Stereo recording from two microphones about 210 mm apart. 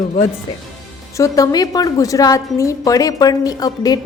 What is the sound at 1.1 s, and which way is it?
A woman's voice, 15° left (ahead or behind).